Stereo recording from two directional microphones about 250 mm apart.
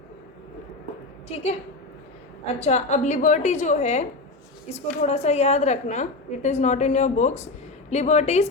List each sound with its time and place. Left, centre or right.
1.3 s a woman's voice: left
2.6 s a woman's voice: left